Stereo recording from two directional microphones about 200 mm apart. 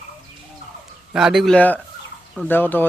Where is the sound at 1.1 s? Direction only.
Centre (ahead or behind).